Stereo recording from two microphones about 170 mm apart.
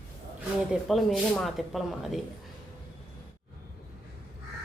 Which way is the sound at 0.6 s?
Centre (ahead or behind).